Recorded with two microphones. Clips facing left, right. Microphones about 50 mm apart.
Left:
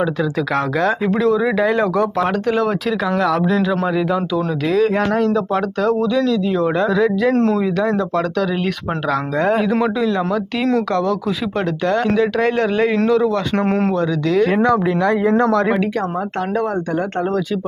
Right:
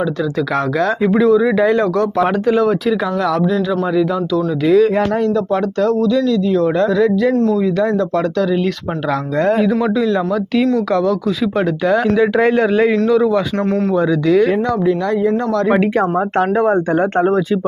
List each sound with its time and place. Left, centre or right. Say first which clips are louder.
0.2 s a man's voice: right 1 dB; centre
4.6 s a man's voice: right 5 dB; centre
7.3 s speech: right 1 dB; left
7.8 s speech: right 2 dB; centre
13.7 s speech: right 1 dB; left
13.9 s speech: right 4 dB; centre
14.5 s speech: even; left
16.6 s speech: right 4 dB; right